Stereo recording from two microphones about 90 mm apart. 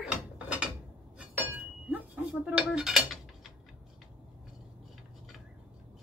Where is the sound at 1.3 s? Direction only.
20° right (ahead or behind).